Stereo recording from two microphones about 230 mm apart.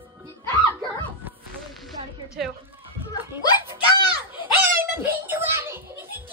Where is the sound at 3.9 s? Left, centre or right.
Centre.